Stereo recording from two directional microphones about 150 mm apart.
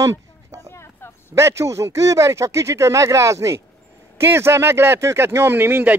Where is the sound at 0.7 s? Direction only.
15° left (ahead or behind).